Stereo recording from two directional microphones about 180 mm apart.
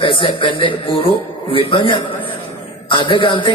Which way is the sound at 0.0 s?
30° left (ahead or behind).